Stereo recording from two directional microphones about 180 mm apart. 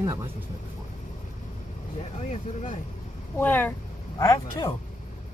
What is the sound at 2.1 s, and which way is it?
Speech, 40° left (ahead or behind).